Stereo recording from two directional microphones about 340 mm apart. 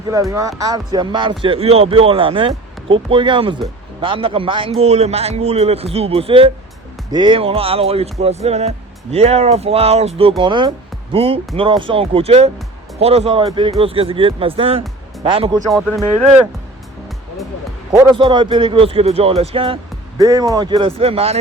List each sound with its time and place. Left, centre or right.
0.1 s a man's voice: centre
15.7 s speech: centre
17.9 s a man's voice: centre